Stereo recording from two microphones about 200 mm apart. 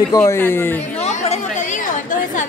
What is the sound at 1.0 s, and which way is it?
Chatter, 30° left (ahead or behind).